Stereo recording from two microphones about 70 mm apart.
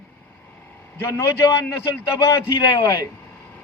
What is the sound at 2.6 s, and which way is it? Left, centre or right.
Speech, left.